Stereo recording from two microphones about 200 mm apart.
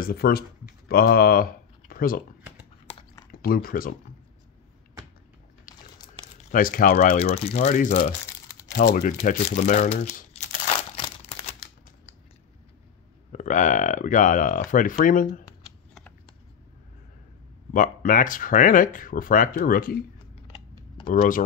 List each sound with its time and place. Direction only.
0.0 s speech: 50° left (ahead or behind)
3.3 s speech: 45° left (ahead or behind)
6.5 s speech: 45° left (ahead or behind)
7.2 s speech: 30° left (ahead or behind)
13.3 s speech: 40° left (ahead or behind)
17.7 s speech: 40° left (ahead or behind)
20.4 s a sound: 30° left (ahead or behind)
21.1 s speech: 40° left (ahead or behind)